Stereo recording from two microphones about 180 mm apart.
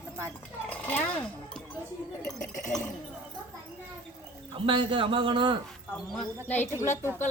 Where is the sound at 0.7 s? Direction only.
10° left (ahead or behind).